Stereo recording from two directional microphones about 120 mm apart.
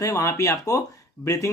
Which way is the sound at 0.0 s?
25° left (ahead or behind).